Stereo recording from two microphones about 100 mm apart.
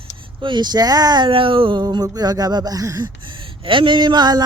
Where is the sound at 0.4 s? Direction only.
50° right (ahead or behind).